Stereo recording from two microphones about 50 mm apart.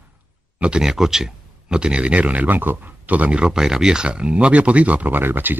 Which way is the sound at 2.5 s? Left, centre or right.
Right.